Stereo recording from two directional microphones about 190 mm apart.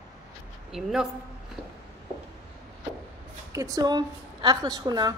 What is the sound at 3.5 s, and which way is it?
A woman's voice, 20° right (ahead or behind).